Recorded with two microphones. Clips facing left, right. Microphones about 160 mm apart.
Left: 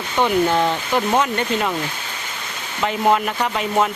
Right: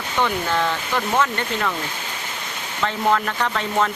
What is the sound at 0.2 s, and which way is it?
Speech, 20° left (ahead or behind).